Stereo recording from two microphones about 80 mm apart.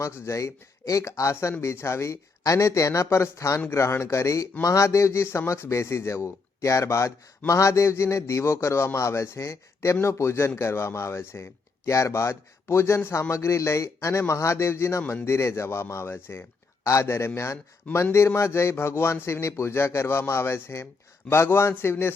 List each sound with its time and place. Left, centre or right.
0.0 s a man's voice: left